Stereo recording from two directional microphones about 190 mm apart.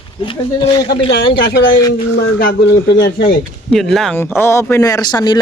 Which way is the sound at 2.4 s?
60° left (ahead or behind).